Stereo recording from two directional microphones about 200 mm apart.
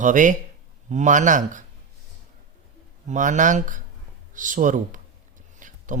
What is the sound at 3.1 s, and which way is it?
Speech, 40° right (ahead or behind).